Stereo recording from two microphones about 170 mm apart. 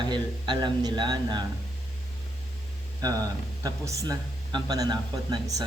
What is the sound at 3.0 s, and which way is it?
Speech, 20° right (ahead or behind).